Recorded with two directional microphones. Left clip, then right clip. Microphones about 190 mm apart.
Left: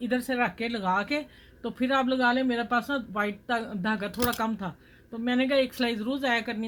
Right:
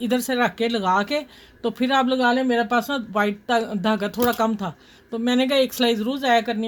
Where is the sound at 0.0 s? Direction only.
60° right (ahead or behind).